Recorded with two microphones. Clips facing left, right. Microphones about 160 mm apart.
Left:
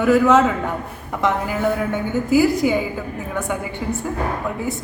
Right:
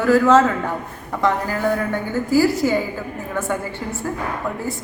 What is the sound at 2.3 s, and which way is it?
Speech, 20° left (ahead or behind).